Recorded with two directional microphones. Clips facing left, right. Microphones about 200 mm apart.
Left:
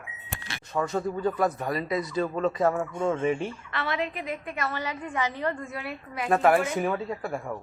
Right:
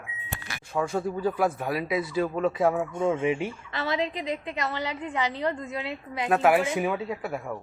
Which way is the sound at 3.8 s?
25° right (ahead or behind).